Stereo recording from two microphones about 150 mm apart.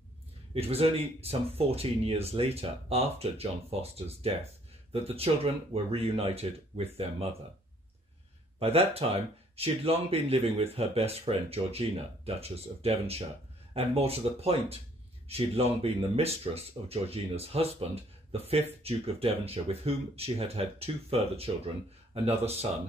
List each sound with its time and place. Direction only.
0.6 s speech: 40° right (ahead or behind)
8.5 s speech: 45° right (ahead or behind)